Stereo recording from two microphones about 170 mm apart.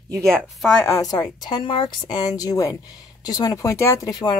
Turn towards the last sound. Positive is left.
turn(degrees=20)  # may be behind; listen again after turning